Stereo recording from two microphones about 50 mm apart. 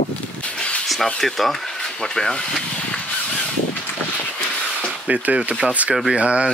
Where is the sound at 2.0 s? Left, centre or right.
Centre.